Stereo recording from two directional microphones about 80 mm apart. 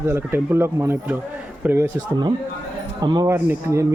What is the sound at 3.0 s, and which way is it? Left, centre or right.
Speech, right.